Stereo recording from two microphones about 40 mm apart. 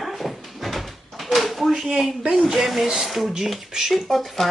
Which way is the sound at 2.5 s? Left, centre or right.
Centre.